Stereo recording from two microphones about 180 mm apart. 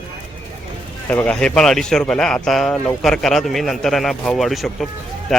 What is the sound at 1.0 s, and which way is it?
Speech, 10° left (ahead or behind).